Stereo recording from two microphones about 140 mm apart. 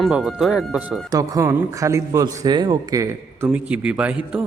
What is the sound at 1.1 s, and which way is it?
A man's voice, 25° right (ahead or behind).